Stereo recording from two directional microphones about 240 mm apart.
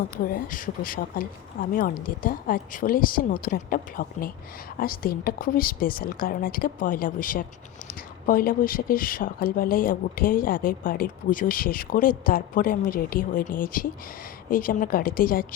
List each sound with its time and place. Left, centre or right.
0.3 s speech: left